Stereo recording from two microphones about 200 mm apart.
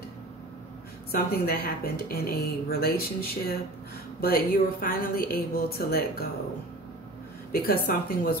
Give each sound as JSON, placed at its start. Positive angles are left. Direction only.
{"t": 1.1, "sound": "a woman's voice", "side_deg": 50}
{"t": 7.5, "sound": "a woman's voice", "side_deg": 50}